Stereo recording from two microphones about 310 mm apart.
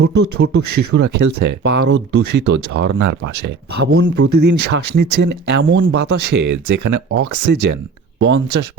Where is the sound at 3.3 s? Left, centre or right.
Right.